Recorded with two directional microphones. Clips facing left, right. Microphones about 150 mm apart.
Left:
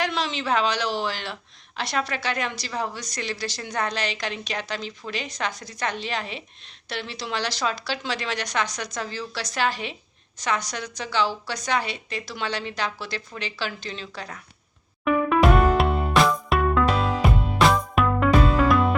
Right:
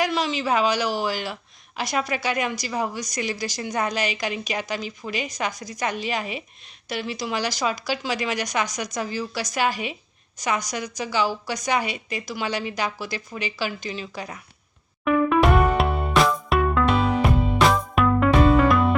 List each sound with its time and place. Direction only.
0.0 s a woman's voice: 5° right (ahead or behind)
15.0 s music: centre (ahead or behind)